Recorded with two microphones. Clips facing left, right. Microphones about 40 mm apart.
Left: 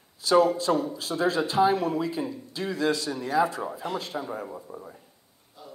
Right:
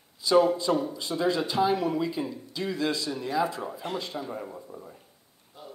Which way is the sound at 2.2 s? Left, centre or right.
Centre.